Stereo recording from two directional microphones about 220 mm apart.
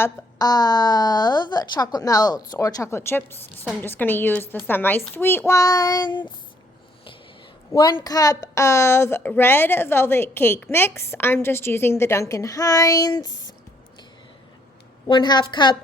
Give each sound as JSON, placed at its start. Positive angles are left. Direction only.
{"t": 0.0, "sound": "a woman's voice", "side_deg": 15}
{"t": 7.7, "sound": "a woman's voice", "side_deg": 15}
{"t": 15.0, "sound": "a woman's voice", "side_deg": 20}